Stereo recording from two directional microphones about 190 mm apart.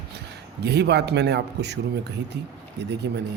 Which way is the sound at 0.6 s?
60° right (ahead or behind).